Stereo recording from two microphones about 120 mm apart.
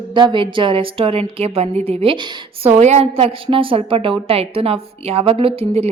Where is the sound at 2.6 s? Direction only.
60° right (ahead or behind).